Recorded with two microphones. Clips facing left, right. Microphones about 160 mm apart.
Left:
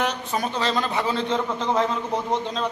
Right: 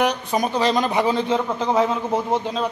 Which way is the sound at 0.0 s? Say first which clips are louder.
Right 5 dB; 15° right (ahead or behind).